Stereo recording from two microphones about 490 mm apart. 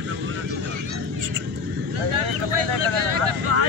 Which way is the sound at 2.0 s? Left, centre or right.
Right.